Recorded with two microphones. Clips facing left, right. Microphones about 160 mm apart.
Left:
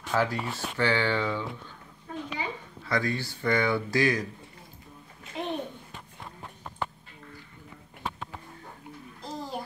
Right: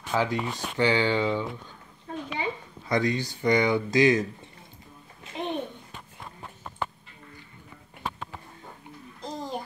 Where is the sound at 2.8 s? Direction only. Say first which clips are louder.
Right 3 dB; 20° right (ahead or behind).